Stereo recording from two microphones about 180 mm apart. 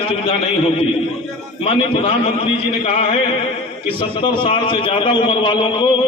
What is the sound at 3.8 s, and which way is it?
A man's voice, 30° left (ahead or behind).